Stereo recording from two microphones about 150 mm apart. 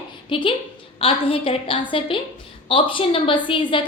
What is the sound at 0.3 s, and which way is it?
A woman's voice, 35° left (ahead or behind).